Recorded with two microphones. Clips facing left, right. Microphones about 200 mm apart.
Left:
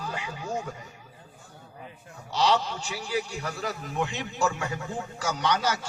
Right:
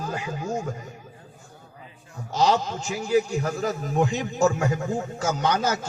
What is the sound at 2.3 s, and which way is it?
A man's voice, 45° right (ahead or behind).